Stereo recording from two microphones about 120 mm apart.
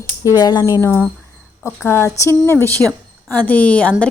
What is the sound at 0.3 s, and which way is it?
A woman's voice, 35° left (ahead or behind).